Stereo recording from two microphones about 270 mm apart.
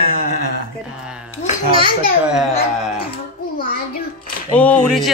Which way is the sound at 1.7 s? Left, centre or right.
Left.